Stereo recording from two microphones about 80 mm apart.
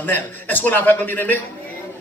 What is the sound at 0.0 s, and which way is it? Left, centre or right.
A man's voice, left.